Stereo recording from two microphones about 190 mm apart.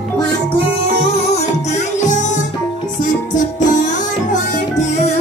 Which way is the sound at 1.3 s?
40° left (ahead or behind).